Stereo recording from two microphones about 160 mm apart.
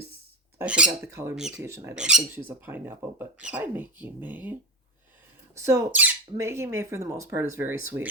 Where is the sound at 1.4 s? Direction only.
5° right (ahead or behind).